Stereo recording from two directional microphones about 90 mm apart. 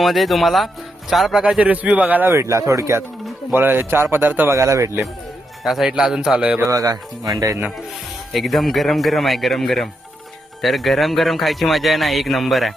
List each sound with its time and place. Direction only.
0.0 s speech: centre (ahead or behind); by 2.4 s 20° right (ahead or behind)
2.4 s speech: 35° right (ahead or behind)
3.5 s speech: 25° right (ahead or behind)
4.5 s speech: 35° right (ahead or behind)
5.6 s speech: 5° right (ahead or behind)
6.7 s speech: 40° right (ahead or behind)
8.3 s speech: centre (ahead or behind)